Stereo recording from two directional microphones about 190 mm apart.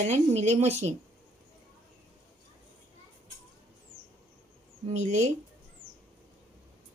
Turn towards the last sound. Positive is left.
turn(degrees=-40)  # may be behind; listen again after turning